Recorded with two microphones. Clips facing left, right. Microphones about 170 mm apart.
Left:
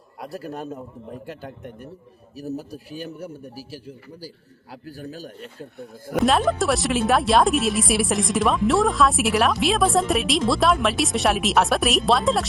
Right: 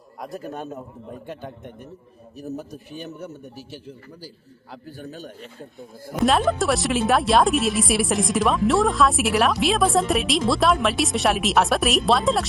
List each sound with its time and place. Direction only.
2.4 s speech: 35° left (ahead or behind)
3.5 s a man's voice: 5° left (ahead or behind)
4.9 s speech: 35° left (ahead or behind)
6.2 s speech: centre (ahead or behind)